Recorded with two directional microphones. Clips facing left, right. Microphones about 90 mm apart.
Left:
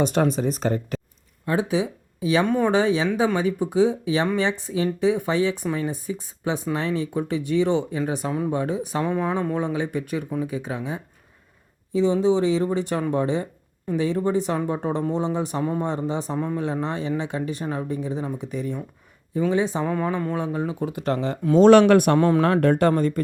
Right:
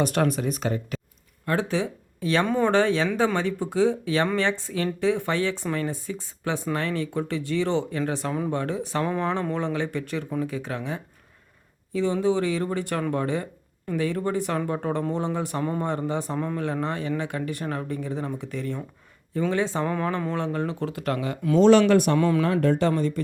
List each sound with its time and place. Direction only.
0.0 s speech: 20° left (ahead or behind); by 0.9 s 40° left (ahead or behind)
1.5 s speech: 15° left (ahead or behind)
8.3 s speech: 5° left (ahead or behind)
8.5 s speech: 15° left (ahead or behind); by 21.6 s 30° left (ahead or behind)
21.6 s speech: 55° left (ahead or behind)